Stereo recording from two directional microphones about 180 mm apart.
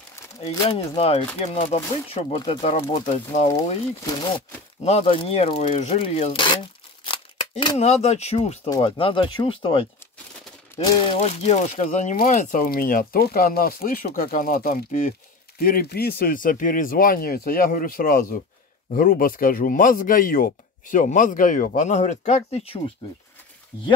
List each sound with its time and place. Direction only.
0.9 s speech: 35° left (ahead or behind)
4.0 s speech: 25° left (ahead or behind)
4.8 s speech: 35° left (ahead or behind)
7.1 s scissors: 25° left (ahead or behind)
7.7 s speech: 40° left (ahead or behind)
8.6 s speech: 25° left (ahead or behind)
11.1 s speech: 40° left (ahead or behind)
15.6 s speech: 55° left (ahead or behind); by 22.8 s 35° left (ahead or behind)